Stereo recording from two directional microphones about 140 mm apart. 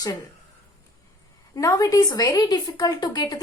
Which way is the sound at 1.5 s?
25° left (ahead or behind).